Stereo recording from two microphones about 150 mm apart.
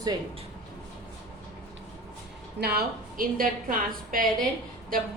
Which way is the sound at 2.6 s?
90° right.